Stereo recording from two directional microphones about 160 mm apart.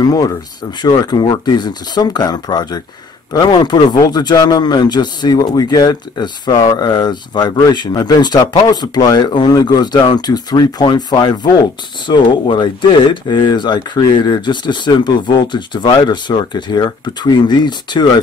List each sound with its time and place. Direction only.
0.0 s speech: 25° left (ahead or behind)